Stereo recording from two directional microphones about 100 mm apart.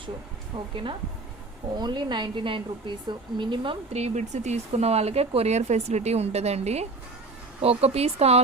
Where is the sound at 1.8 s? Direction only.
50° right (ahead or behind).